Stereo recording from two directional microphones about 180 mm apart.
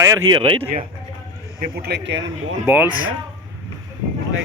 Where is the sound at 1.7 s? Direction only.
65° right (ahead or behind); by 2.6 s 85° right.